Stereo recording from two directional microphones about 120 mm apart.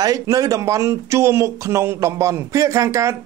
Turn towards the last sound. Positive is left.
turn(degrees=-25)  # may be behind; listen again after turning